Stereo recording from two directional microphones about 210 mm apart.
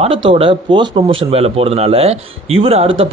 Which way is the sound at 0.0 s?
25° right (ahead or behind).